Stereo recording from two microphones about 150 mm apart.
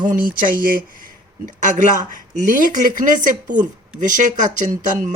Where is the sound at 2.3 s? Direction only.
60° right (ahead or behind).